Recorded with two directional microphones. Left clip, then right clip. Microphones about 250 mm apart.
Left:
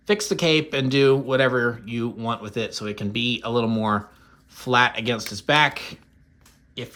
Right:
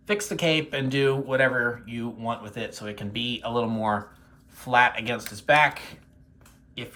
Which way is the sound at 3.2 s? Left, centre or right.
Left.